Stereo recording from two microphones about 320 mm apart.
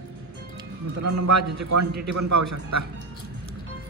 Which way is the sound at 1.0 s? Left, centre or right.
Right.